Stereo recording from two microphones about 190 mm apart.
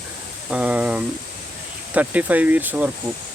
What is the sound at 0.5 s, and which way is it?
Speech, 5° right (ahead or behind).